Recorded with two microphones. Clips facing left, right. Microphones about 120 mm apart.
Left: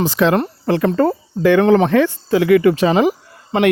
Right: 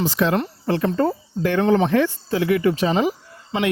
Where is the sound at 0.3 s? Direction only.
45° left (ahead or behind).